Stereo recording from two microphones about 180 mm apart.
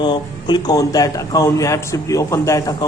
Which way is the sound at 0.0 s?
25° left (ahead or behind).